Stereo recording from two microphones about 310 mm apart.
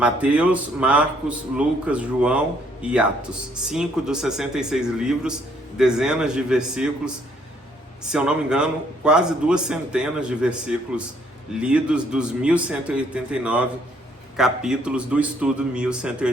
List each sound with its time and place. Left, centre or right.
0.0 s a man's voice: centre
8.1 s a man's voice: centre